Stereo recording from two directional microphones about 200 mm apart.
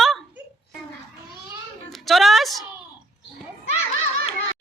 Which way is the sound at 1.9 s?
Centre (ahead or behind).